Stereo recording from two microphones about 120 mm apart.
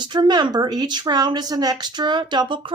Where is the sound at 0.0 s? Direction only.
40° right (ahead or behind).